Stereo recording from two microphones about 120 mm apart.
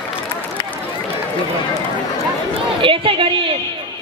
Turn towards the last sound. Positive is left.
turn(degrees=-50)  # may be behind; listen again after turning